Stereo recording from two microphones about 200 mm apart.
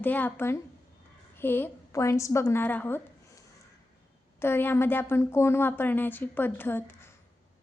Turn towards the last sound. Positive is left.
turn(degrees=10)  # may be behind; listen again after turning